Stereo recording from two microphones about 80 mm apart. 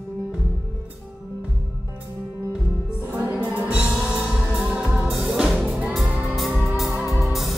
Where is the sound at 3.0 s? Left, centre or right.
Right.